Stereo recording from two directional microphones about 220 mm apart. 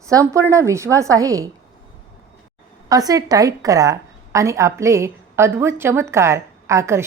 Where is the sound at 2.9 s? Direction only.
15° right (ahead or behind).